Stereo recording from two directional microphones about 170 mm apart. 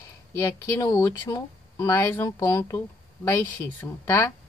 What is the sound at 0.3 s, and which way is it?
Speech, 15° left (ahead or behind).